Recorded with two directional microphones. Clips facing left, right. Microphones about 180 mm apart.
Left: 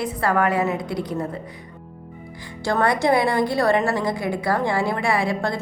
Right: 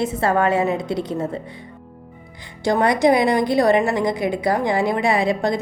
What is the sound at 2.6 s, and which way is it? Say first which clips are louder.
A woman's voice: right 4 dB; 20° right (ahead or behind).